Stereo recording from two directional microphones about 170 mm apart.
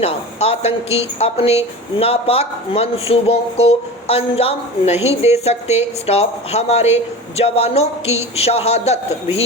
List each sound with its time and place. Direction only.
0.0 s a woman's voice: 35° left (ahead or behind)